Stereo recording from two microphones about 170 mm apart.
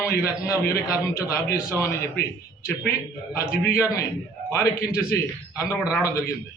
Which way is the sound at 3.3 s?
15° left (ahead or behind).